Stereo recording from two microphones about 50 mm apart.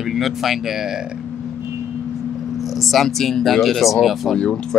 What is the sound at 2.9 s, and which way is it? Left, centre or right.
Speech, centre.